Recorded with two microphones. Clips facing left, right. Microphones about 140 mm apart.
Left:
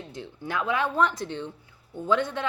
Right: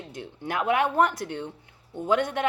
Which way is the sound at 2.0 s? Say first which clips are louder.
Right 2 dB; 15° right (ahead or behind).